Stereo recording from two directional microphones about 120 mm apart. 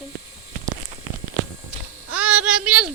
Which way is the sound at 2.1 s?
10° right (ahead or behind).